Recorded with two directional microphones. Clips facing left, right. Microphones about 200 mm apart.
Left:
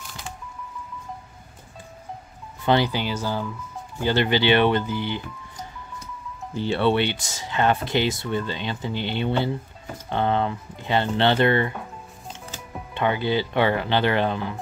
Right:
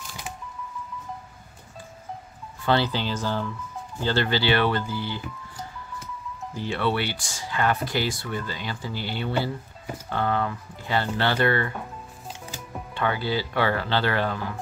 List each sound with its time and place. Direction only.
2.6 s speech: 15° left (ahead or behind)
6.5 s speech: 25° left (ahead or behind)
12.9 s speech: 20° left (ahead or behind)